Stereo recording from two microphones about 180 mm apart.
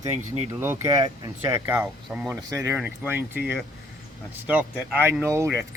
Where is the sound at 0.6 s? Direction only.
15° right (ahead or behind).